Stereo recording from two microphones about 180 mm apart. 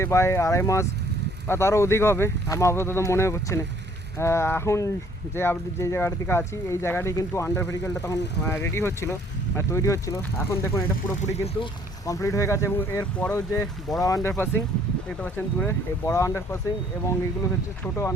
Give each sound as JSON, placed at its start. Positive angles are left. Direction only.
{"t": 0.0, "sound": "speech", "side_deg": 15}
{"t": 11.2, "sound": "speech", "side_deg": 35}
{"t": 12.0, "sound": "speech", "side_deg": 20}
{"t": 17.8, "sound": "speech", "side_deg": 15}